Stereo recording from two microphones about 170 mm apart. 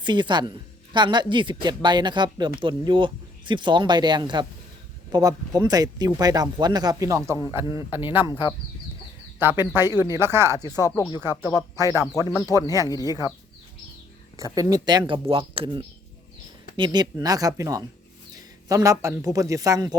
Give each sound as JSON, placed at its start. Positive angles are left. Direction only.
{"t": 0.0, "sound": "a woman's voice", "side_deg": -25}
{"t": 7.6, "sound": "speech", "side_deg": 30}
{"t": 7.9, "sound": "speech", "side_deg": -10}
{"t": 8.2, "sound": "speech", "side_deg": 25}
{"t": 9.4, "sound": "speech", "side_deg": -15}
{"t": 10.6, "sound": "speech", "side_deg": 20}
{"t": 11.8, "sound": "speech", "side_deg": -15}
{"t": 12.8, "sound": "speech", "side_deg": 20}
{"t": 13.1, "sound": "a woman's voice", "side_deg": -20}
{"t": 14.3, "sound": "a woman's voice", "side_deg": -20}